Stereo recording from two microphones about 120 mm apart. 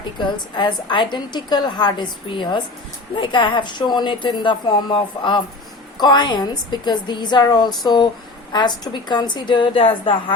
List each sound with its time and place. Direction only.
0.2 s a woman's voice: 40° left (ahead or behind)